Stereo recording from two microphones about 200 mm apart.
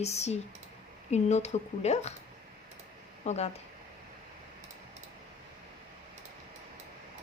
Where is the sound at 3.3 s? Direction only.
30° left (ahead or behind).